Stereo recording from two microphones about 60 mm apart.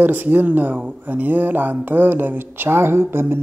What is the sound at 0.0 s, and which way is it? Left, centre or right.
Speech, right.